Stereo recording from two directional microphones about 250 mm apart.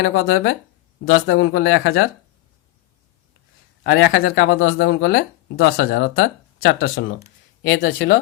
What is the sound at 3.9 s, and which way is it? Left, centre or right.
Speech, left.